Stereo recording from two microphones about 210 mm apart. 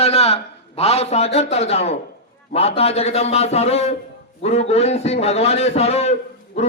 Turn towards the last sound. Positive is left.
turn(degrees=30)  # may be behind; listen again after turning